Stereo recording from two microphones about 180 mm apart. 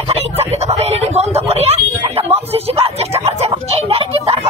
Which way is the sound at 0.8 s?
35° right (ahead or behind).